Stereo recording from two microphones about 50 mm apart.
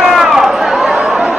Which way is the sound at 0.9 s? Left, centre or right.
Centre.